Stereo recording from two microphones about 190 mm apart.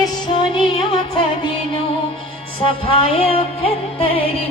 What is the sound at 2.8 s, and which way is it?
Music, 30° left (ahead or behind).